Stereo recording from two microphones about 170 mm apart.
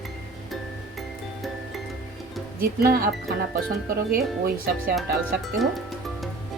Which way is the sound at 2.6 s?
60° right (ahead or behind).